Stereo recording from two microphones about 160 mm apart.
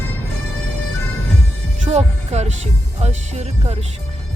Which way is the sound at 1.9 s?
45° right (ahead or behind).